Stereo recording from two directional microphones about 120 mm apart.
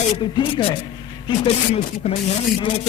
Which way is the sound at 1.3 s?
60° left (ahead or behind).